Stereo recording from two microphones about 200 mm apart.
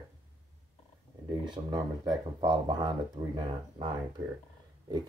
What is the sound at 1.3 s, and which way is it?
Speech, 20° right (ahead or behind).